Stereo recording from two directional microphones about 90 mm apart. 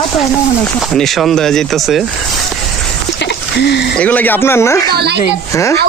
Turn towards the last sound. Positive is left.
turn(degrees=30)  # may be behind; listen again after turning